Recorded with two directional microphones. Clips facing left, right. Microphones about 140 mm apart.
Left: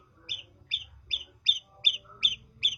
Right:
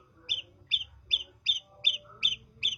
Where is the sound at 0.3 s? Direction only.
20° right (ahead or behind).